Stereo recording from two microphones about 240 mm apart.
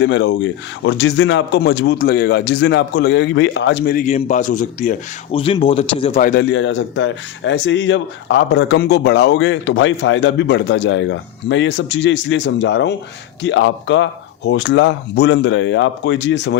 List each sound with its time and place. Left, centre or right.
0.0 s speech: left